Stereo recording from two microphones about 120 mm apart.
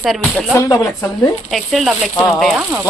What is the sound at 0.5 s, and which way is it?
Speech, 25° left (ahead or behind).